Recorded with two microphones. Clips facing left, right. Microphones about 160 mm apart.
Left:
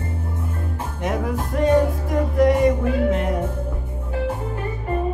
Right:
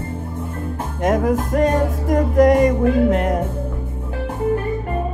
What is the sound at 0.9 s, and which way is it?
Music, 45° right (ahead or behind).